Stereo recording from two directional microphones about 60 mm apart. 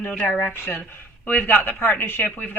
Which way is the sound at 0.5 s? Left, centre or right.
Left.